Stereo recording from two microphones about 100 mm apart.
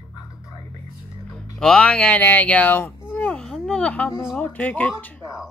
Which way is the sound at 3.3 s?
5° left (ahead or behind).